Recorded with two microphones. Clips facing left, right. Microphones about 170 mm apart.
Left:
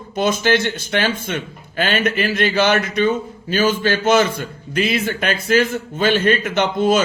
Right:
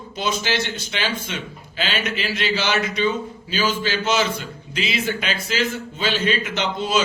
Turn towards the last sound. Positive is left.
turn(degrees=50)  # may be behind; listen again after turning